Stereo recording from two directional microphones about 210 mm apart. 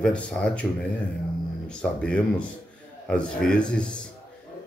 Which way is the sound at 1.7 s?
5° left (ahead or behind).